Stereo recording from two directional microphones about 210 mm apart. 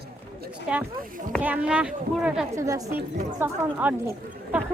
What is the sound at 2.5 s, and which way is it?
A woman's voice, 15° right (ahead or behind).